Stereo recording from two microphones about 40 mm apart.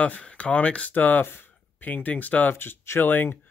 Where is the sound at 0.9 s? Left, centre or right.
Left.